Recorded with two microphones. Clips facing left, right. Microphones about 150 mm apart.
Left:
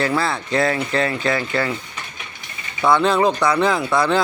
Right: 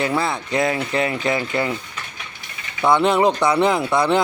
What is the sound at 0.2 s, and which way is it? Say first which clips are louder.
Mechanisms: left 1 dB; 15° right (ahead or behind).